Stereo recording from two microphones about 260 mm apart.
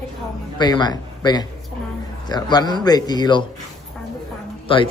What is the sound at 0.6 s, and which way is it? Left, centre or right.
Speech, centre.